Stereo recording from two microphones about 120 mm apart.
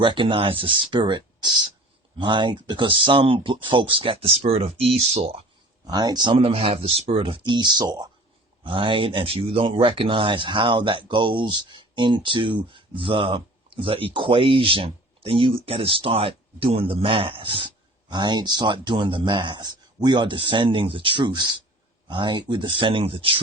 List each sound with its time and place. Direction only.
0.0 s speech: 45° right (ahead or behind); by 5.4 s 60° right (ahead or behind)
5.9 s speech: 35° right (ahead or behind)